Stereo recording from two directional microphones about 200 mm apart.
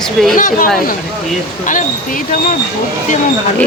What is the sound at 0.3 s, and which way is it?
Speech, 40° left (ahead or behind).